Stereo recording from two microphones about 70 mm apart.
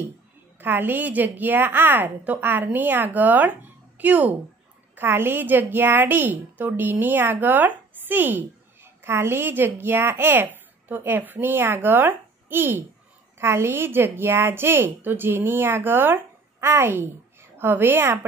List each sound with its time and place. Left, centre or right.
0.6 s a woman's voice: right